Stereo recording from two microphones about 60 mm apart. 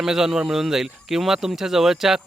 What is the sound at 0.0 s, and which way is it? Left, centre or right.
Speech, centre.